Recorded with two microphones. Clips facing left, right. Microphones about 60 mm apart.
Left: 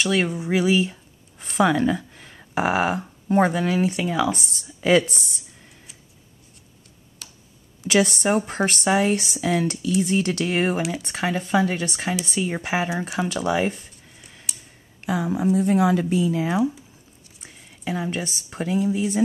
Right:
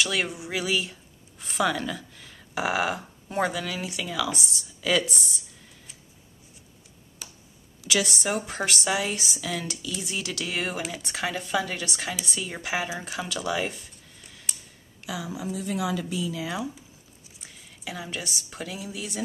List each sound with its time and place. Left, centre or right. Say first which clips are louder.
0.0 s speech: left 5 dB; left
1.4 s a sound: left 7 dB; left
3.3 s speech: left 8 dB; left
7.2 s tick: even; centre
7.8 s speech: left 7 dB; left
11.1 s speech: left 6 dB; left
15.0 s speech: left 9 dB; left
16.4 s speech: left 9 dB; centre
17.4 s speech: left 3 dB; left